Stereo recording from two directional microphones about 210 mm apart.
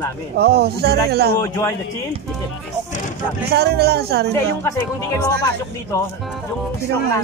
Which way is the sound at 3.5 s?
50° right (ahead or behind).